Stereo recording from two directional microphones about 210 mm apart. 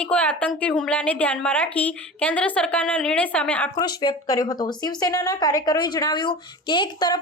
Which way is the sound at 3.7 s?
20° left (ahead or behind).